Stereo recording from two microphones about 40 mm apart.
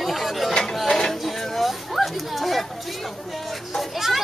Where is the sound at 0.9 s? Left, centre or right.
Left.